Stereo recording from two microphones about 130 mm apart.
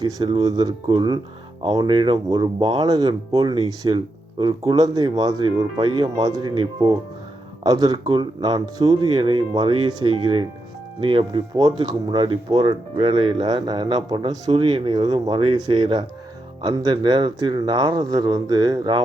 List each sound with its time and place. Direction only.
0.0 s speech: 35° right (ahead or behind)
9.2 s speech: 40° right (ahead or behind)